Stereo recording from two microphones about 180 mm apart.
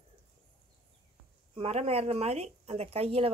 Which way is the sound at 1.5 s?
35° right (ahead or behind).